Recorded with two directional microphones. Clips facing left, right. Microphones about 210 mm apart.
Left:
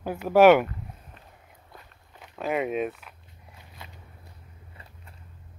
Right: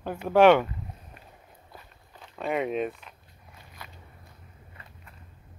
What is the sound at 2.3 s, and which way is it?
Speech, centre (ahead or behind).